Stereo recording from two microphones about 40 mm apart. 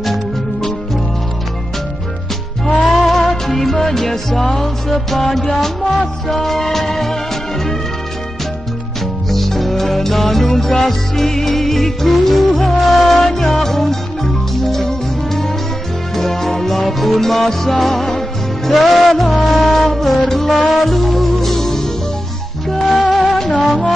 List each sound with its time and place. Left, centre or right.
0.0 s music: centre
2.9 s music: centre
9.3 s music: centre